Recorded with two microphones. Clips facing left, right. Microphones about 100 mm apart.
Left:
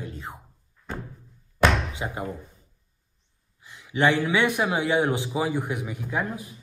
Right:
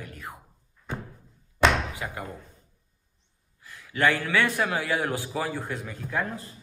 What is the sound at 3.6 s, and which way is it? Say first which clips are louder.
A man's voice: left 2 dB; 20° left (ahead or behind).